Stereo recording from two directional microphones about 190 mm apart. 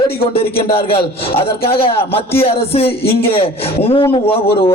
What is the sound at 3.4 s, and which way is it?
Speech, 30° left (ahead or behind).